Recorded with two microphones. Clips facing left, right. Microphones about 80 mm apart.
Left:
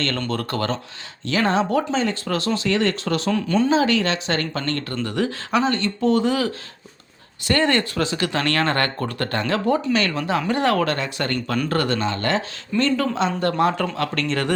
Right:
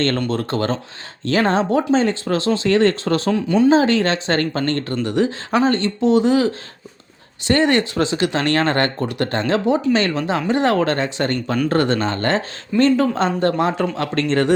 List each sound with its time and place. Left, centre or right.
0.3 s speech: right
5.0 s speech: right
6.0 s speech: right
13.6 s speech: right